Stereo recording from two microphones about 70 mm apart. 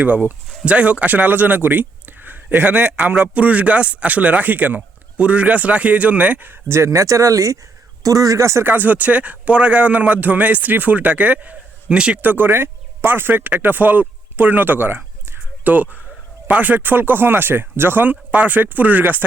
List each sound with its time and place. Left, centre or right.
0.0 s speech: right
6.7 s speech: right
8.6 s speech: right
12.2 s speech: right